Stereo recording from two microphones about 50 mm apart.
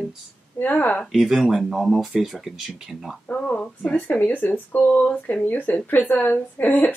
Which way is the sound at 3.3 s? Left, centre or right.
Left.